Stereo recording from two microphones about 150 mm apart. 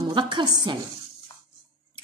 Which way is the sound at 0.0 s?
30° right (ahead or behind).